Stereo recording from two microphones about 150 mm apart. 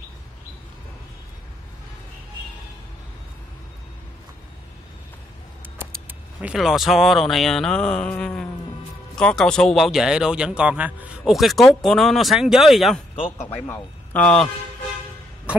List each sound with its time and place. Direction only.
6.0 s speech: 5° right (ahead or behind)
13.1 s a man's voice: 40° left (ahead or behind)
13.5 s a man's voice: 15° left (ahead or behind)